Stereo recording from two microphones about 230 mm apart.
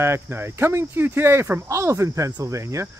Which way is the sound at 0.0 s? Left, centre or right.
Centre.